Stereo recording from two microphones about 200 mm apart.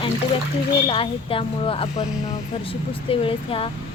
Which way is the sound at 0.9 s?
25° left (ahead or behind).